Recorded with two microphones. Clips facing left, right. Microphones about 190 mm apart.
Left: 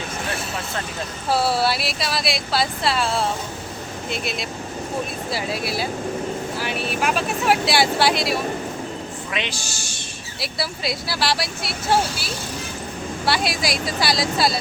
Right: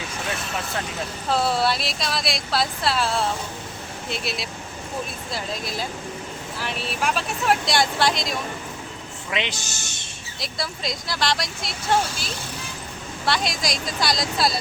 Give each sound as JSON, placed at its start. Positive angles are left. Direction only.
{"t": 1.3, "sound": "speech", "side_deg": 5}
{"t": 5.3, "sound": "speech", "side_deg": 10}
{"t": 9.3, "sound": "a man's voice", "side_deg": -20}
{"t": 10.4, "sound": "speech", "side_deg": 5}